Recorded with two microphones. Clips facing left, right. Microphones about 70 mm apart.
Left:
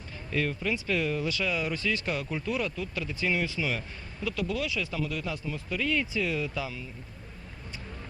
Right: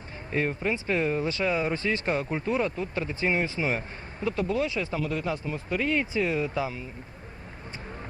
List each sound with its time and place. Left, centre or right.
0.3 s speech: right